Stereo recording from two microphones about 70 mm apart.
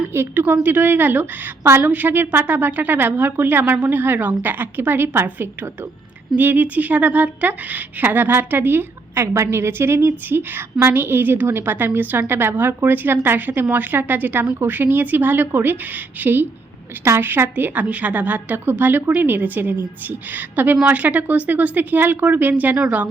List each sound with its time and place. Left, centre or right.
0.1 s a woman's voice: right; by 23.0 s centre